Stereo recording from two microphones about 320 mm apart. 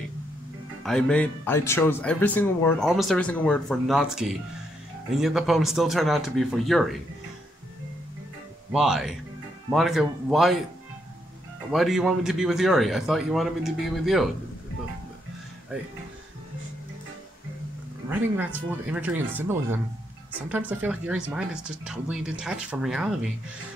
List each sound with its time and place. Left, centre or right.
0.8 s speech: centre
8.7 s speech: centre
11.7 s speech: centre
18.1 s speech: centre